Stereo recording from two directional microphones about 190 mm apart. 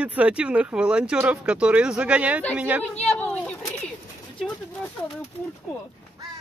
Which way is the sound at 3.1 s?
10° left (ahead or behind).